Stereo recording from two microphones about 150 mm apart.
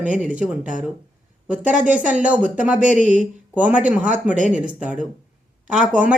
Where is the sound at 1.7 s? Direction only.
55° right (ahead or behind).